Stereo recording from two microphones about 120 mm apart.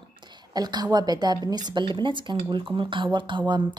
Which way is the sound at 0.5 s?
35° right (ahead or behind).